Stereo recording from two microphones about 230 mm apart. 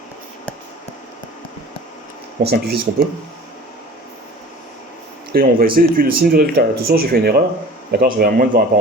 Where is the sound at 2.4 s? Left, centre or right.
Right.